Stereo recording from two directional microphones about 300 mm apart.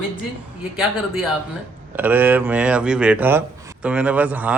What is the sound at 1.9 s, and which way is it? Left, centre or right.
Speech, centre.